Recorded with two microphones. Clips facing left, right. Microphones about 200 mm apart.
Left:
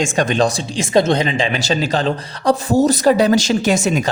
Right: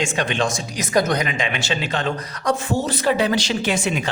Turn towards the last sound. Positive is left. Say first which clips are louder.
# left 6 dB
turn(degrees=40)  # may be behind; listen again after turning